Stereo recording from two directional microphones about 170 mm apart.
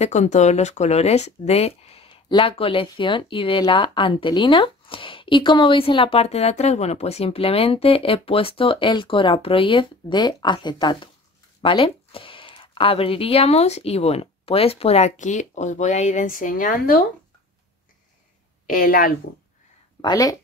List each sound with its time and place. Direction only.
0.0 s speech: 45° left (ahead or behind)
18.7 s a woman's voice: 55° left (ahead or behind)
20.0 s speech: 20° left (ahead or behind)